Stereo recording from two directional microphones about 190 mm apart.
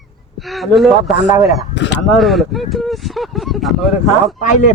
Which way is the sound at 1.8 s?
65° left (ahead or behind).